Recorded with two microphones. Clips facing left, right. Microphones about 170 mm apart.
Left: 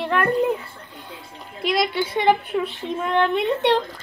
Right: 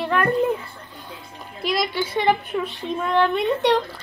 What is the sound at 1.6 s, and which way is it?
Speech, 25° left (ahead or behind).